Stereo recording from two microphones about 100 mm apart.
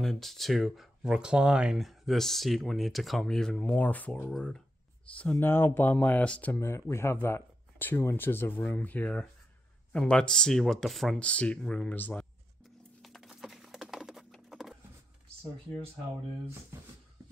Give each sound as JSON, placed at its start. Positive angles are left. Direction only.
{"t": 0.0, "sound": "speech", "side_deg": 5}
{"t": 4.3, "sound": "speech", "side_deg": 5}
{"t": 5.2, "sound": "speech", "side_deg": 15}
{"t": 6.5, "sound": "speech", "side_deg": 25}
{"t": 11.1, "sound": "speech", "side_deg": 10}
{"t": 13.0, "sound": "a sound", "side_deg": 0}
{"t": 16.7, "sound": "speech", "side_deg": -30}